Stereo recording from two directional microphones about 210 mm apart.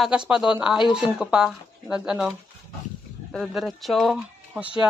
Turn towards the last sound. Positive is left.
turn(degrees=-5)  # may be behind; listen again after turning